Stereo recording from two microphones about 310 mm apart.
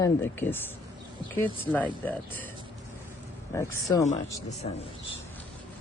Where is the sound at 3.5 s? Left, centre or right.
Centre.